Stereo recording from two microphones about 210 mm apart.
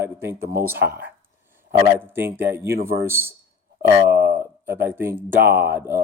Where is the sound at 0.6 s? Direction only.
10° right (ahead or behind).